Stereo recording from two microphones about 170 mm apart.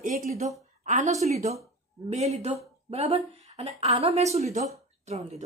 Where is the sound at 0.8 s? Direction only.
45° right (ahead or behind).